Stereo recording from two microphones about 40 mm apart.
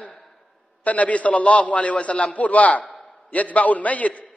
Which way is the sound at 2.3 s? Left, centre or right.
Left.